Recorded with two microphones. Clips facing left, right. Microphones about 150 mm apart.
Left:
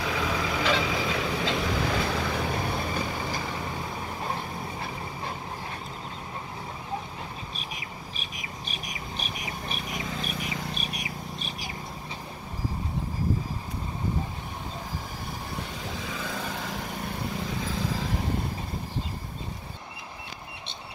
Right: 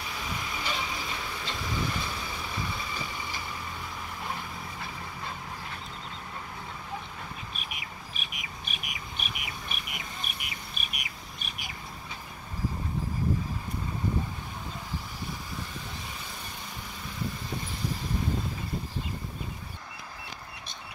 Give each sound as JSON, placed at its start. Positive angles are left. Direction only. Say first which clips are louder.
{"t": 0.0, "sound": "vehicle", "louder": "left 8 dB", "side_deg": 90}
{"t": 4.2, "sound": "vehicle", "louder": "left 3 dB", "side_deg": 40}
{"t": 7.5, "sound": "squawk", "louder": "left 3 dB", "side_deg": 35}
{"t": 10.8, "sound": "bird", "louder": "left 7 dB", "side_deg": 35}
{"t": 15.8, "sound": "vehicle", "louder": "left 7 dB", "side_deg": 90}